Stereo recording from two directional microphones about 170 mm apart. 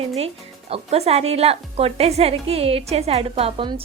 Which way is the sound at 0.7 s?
40° right (ahead or behind).